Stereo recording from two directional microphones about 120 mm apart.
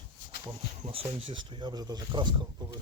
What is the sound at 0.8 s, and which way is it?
Speech, 50° right (ahead or behind).